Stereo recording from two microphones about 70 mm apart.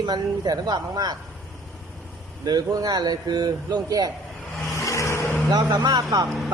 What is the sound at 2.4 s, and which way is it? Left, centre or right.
Speech, right.